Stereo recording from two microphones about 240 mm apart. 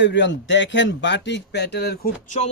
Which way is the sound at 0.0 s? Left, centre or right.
Left.